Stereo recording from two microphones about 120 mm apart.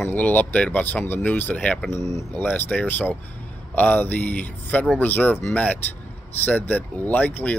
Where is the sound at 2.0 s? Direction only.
25° left (ahead or behind).